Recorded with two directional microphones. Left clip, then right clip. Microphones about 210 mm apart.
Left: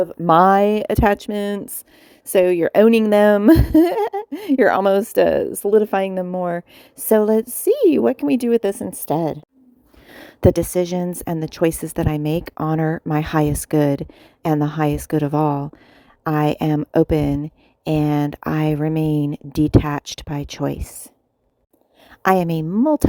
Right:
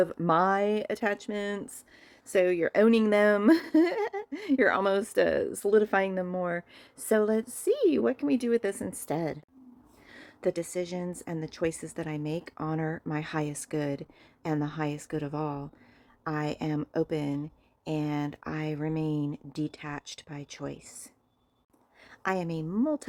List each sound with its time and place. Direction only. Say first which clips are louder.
0.3 s speech: left 14 dB; 40° left (ahead or behind)
10.1 s speech: left 14 dB; 45° left (ahead or behind)
22.2 s a woman's voice: left 14 dB; 45° left (ahead or behind)